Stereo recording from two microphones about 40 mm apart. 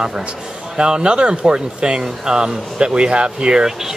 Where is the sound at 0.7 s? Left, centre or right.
Right.